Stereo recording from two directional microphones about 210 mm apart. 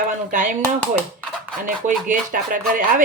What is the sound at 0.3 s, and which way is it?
Speech, 40° right (ahead or behind).